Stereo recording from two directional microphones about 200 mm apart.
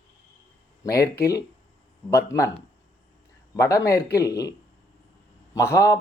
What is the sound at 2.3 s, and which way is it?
Speech, 15° left (ahead or behind).